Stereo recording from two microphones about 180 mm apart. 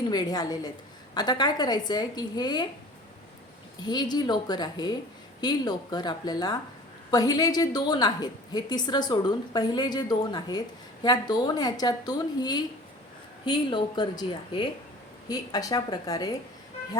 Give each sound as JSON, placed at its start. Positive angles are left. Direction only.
{"t": 0.1, "sound": "a woman's voice", "side_deg": 20}
{"t": 3.8, "sound": "a woman's voice", "side_deg": 25}